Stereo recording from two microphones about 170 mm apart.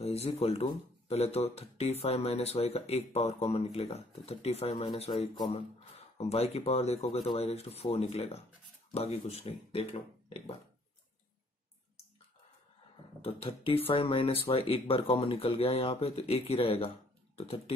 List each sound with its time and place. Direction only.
0.0 s speech: 35° left (ahead or behind)
13.2 s speech: 35° left (ahead or behind)